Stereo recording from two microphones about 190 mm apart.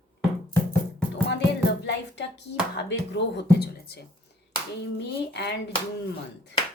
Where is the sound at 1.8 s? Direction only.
65° left (ahead or behind).